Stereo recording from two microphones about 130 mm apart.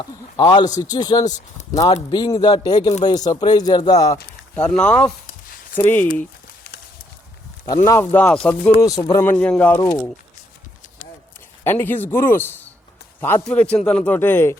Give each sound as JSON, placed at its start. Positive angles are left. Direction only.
{"t": 0.0, "sound": "a man's voice", "side_deg": 35}
{"t": 4.5, "sound": "a man's voice", "side_deg": 10}
{"t": 7.9, "sound": "a man's voice", "side_deg": 15}
{"t": 8.8, "sound": "speech", "side_deg": 30}
{"t": 9.2, "sound": "a man's voice", "side_deg": 10}
{"t": 11.6, "sound": "a man's voice", "side_deg": 15}